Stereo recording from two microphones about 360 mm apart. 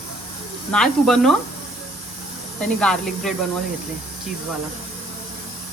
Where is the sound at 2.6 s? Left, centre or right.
Centre.